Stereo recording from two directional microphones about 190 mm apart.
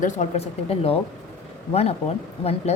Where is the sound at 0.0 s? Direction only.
35° left (ahead or behind).